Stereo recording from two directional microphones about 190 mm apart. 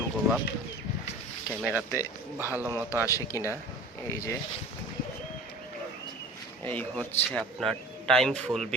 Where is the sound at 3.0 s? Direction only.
15° left (ahead or behind).